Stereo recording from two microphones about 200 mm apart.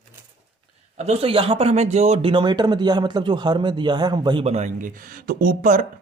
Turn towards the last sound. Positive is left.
turn(degrees=-40)  # may be behind; listen again after turning